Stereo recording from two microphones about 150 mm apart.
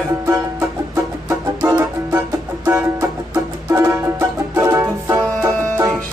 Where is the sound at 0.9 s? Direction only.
20° right (ahead or behind).